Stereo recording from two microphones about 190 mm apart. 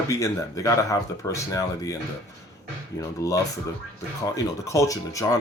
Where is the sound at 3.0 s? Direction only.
20° left (ahead or behind).